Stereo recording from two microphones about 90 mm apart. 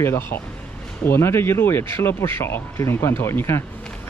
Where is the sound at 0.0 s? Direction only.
25° left (ahead or behind).